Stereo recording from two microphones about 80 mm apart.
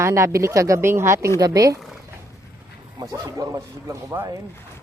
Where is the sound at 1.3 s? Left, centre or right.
Right.